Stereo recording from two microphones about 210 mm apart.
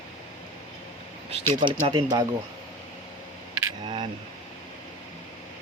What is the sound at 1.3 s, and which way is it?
Speech, 25° right (ahead or behind).